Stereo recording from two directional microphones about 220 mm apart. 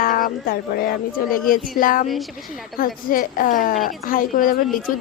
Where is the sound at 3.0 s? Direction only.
40° left (ahead or behind).